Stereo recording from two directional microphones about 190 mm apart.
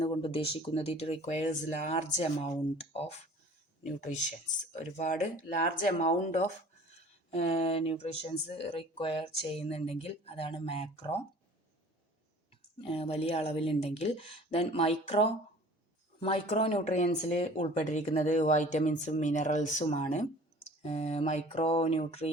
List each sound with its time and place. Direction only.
0.0 s speech: 30° left (ahead or behind)
12.8 s speech: 30° left (ahead or behind)